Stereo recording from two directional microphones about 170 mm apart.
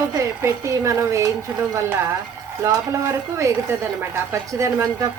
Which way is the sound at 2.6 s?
15° right (ahead or behind).